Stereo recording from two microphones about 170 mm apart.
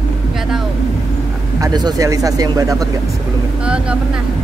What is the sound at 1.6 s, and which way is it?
Speech, 25° right (ahead or behind).